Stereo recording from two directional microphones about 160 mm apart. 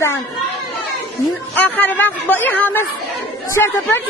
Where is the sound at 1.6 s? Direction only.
10° left (ahead or behind).